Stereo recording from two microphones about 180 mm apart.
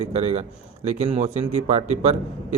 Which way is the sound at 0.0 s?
40° right (ahead or behind).